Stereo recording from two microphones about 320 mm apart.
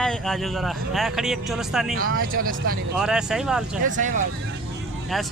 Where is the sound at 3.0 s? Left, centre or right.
Centre.